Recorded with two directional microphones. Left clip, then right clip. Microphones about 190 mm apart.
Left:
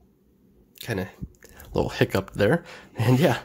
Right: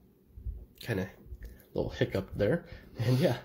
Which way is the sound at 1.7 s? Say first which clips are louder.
Left 8 dB; 30° left (ahead or behind).